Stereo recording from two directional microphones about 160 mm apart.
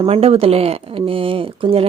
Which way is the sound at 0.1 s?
40° right (ahead or behind).